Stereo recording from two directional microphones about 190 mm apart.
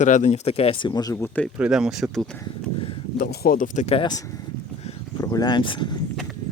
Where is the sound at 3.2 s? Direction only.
55° left (ahead or behind).